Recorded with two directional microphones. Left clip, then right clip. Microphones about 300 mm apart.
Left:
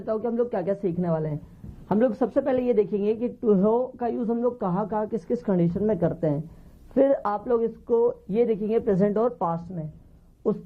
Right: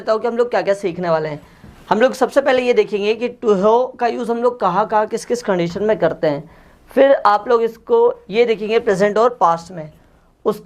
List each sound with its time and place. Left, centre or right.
0.0 s speech: centre
7.9 s speech: right
8.3 s speech: centre